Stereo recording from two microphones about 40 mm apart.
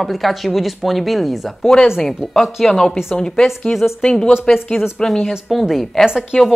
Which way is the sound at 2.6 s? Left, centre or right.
Centre.